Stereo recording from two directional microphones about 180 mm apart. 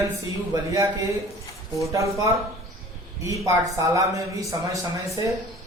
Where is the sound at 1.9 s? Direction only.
15° right (ahead or behind).